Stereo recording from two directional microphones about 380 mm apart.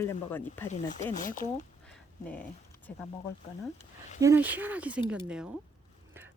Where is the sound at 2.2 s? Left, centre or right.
Centre.